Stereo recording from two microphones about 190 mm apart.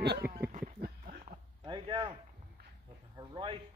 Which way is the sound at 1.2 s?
25° right (ahead or behind).